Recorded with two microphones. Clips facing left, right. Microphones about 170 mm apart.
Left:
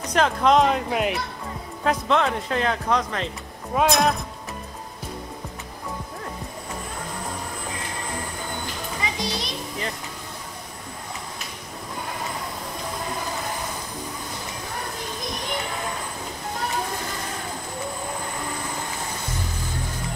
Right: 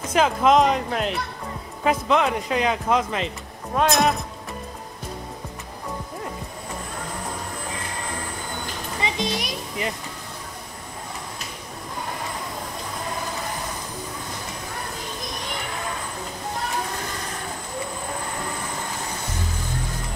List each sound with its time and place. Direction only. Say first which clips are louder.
0.0 s speech: right 1 dB; 5° right (ahead or behind)
9.2 s a child's voice: right 3 dB; 20° right (ahead or behind)